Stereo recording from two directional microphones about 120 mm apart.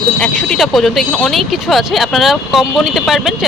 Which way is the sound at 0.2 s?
5° left (ahead or behind).